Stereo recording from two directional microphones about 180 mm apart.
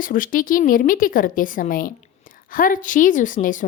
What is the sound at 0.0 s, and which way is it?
A woman's voice, 50° left (ahead or behind).